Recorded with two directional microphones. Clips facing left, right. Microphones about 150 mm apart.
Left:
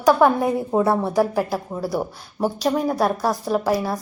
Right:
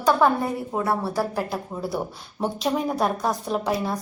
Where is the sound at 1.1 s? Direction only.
10° left (ahead or behind).